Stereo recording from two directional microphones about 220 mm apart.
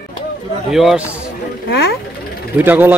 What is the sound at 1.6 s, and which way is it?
Speech, 50° left (ahead or behind).